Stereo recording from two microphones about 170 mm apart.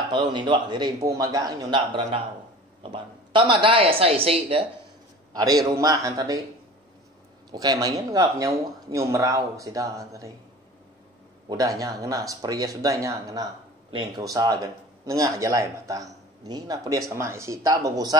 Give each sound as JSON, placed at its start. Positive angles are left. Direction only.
{"t": 0.1, "sound": "a woman's voice", "side_deg": -25}
{"t": 5.3, "sound": "speech", "side_deg": -20}
{"t": 7.5, "sound": "speech", "side_deg": -20}
{"t": 11.4, "sound": "speech", "side_deg": -20}